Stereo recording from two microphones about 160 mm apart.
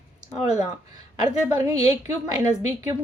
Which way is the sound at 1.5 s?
25° right (ahead or behind).